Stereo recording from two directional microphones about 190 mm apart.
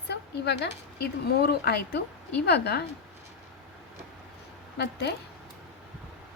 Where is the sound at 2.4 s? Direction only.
60° left (ahead or behind).